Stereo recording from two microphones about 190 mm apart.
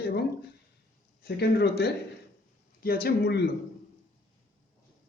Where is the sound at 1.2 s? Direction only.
60° left (ahead or behind).